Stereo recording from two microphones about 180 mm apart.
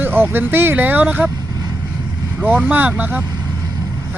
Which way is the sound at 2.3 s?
10° right (ahead or behind).